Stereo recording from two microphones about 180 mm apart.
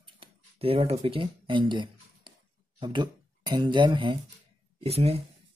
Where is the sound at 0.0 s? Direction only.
30° right (ahead or behind).